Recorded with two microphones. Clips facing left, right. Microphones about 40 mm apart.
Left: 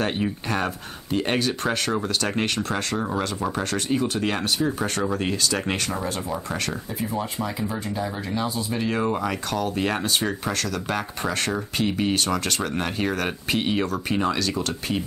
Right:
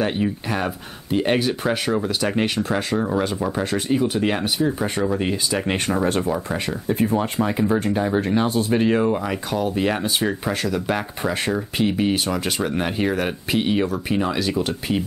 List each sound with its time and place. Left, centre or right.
0.0 s speech: centre
6.9 s speech: right
8.7 s speech: right; by 14.4 s centre